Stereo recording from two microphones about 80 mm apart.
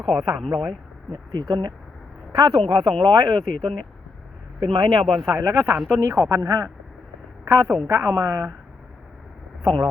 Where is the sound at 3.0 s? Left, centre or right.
Right.